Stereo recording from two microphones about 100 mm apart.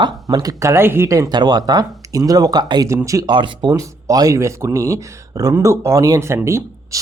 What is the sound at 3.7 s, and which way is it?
Speech, 35° right (ahead or behind).